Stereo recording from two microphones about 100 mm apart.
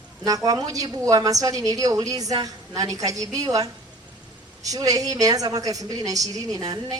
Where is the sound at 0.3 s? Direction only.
35° right (ahead or behind).